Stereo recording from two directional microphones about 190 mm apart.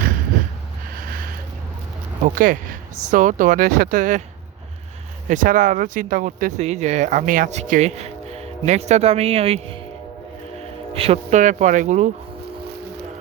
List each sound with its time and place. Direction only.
2.2 s speech: 45° right (ahead or behind)
5.3 s speech: 45° right (ahead or behind)
10.9 s speech: 30° right (ahead or behind)